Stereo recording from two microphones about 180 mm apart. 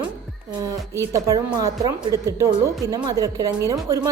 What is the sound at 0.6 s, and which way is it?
A woman's voice, 20° right (ahead or behind).